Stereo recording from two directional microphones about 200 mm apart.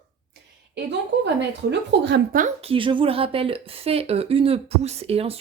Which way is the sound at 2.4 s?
35° right (ahead or behind).